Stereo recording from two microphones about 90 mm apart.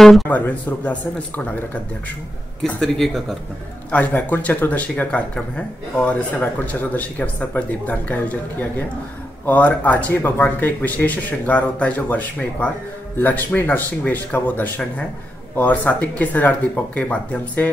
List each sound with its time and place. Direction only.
0.0 s speech: centre (ahead or behind)
0.3 s speech: 20° left (ahead or behind)
2.6 s speech: 5° left (ahead or behind)
3.9 s speech: 20° left (ahead or behind)